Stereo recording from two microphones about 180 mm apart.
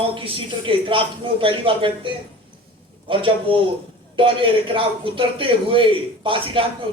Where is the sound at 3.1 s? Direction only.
30° right (ahead or behind).